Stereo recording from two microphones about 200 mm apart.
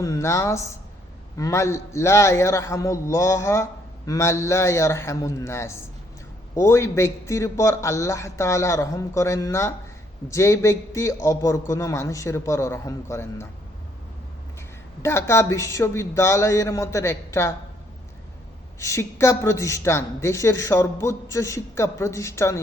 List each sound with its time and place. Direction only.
0.0 s a man's voice: 15° left (ahead or behind)
15.0 s a man's voice: 15° left (ahead or behind)
18.8 s a man's voice: 15° left (ahead or behind)